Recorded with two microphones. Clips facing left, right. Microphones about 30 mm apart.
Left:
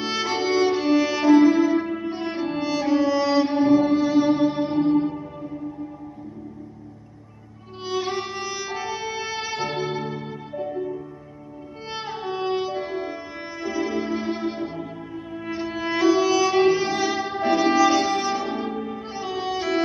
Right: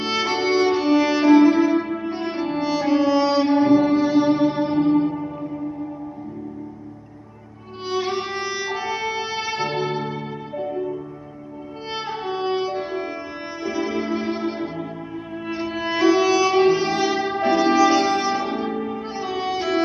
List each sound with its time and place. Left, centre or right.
0.0 s music: centre
7.9 s violin: right
10.6 s music: centre
11.9 s music: centre